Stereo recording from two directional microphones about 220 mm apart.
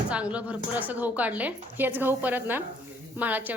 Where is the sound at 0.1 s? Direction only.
5° right (ahead or behind).